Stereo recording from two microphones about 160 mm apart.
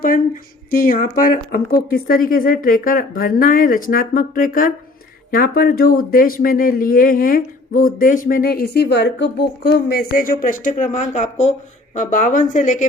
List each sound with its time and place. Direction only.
0.7 s a woman's voice: 65° left (ahead or behind)